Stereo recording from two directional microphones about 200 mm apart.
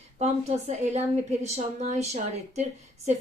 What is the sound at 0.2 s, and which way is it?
A woman's voice, 35° right (ahead or behind).